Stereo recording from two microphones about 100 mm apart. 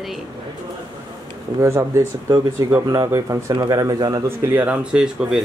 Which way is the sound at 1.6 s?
30° right (ahead or behind).